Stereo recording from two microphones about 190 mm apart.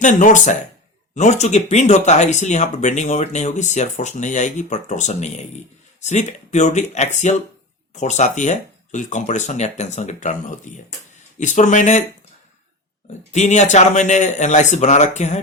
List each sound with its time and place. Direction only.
0.0 s speech: 40° left (ahead or behind)
13.3 s speech: 40° left (ahead or behind)